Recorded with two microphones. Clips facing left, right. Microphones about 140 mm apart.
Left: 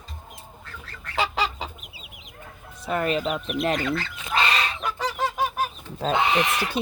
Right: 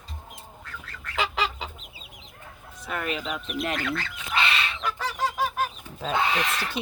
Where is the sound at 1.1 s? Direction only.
35° left (ahead or behind).